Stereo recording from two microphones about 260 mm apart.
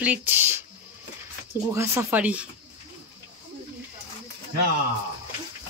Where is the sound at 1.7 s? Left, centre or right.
Centre.